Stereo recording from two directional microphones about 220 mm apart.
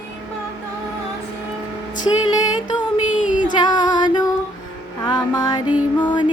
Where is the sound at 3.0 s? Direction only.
5° right (ahead or behind).